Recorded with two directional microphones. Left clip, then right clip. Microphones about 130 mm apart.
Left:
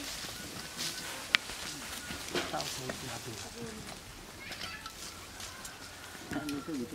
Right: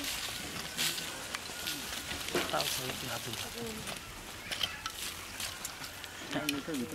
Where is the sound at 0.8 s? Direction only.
10° right (ahead or behind).